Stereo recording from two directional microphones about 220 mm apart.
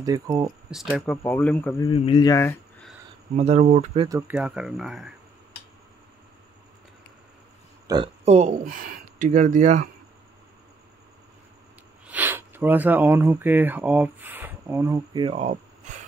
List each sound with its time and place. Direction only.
0.0 s speech: 15° right (ahead or behind)
0.7 s speech: 5° right (ahead or behind)
1.1 s speech: 10° left (ahead or behind)
1.9 s speech: 25° left (ahead or behind)
3.3 s speech: 30° right (ahead or behind)
4.3 s speech: 5° right (ahead or behind)
7.8 s a sound: 20° right (ahead or behind)
8.3 s speech: 30° right (ahead or behind)
12.1 s speech: 10° right (ahead or behind); by 16.0 s 30° right (ahead or behind)